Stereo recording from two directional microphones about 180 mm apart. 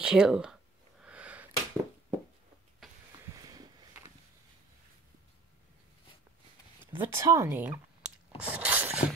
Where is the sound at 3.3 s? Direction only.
20° right (ahead or behind).